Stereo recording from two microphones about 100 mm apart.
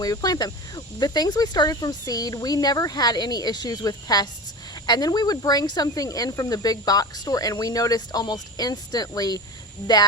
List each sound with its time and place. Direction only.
0.0 s a woman's voice: 40° left (ahead or behind)